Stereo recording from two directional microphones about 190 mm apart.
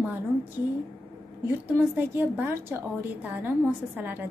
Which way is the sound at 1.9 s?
10° right (ahead or behind).